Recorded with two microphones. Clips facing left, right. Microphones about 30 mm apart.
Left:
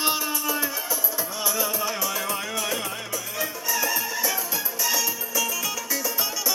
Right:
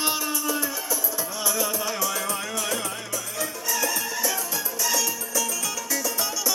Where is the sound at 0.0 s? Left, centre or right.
Centre.